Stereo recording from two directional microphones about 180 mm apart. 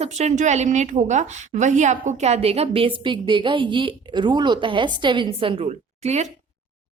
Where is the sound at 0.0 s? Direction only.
40° right (ahead or behind).